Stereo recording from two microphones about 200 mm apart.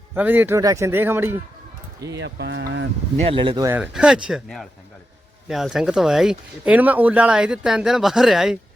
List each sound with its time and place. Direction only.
0.1 s speech: 10° right (ahead or behind)
2.1 s speech: 60° right (ahead or behind)
3.2 s speech: 25° right (ahead or behind)
3.8 s speech: 5° right (ahead or behind)